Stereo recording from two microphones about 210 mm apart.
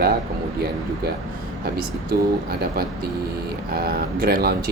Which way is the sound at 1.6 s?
45° right (ahead or behind).